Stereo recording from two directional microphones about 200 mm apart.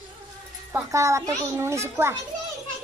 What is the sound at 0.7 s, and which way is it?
A child's voice, 15° right (ahead or behind).